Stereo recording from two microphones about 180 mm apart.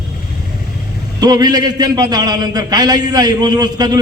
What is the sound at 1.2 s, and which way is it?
A man's voice, 20° right (ahead or behind).